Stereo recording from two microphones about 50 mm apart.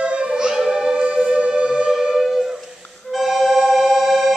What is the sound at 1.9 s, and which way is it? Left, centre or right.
Music, centre.